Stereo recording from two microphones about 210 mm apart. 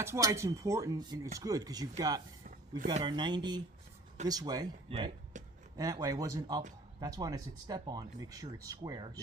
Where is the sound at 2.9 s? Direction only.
20° right (ahead or behind).